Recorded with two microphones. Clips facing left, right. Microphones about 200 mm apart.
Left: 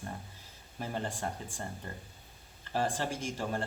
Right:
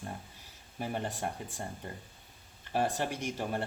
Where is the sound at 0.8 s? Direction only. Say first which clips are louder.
Right 1 dB; 15° right (ahead or behind).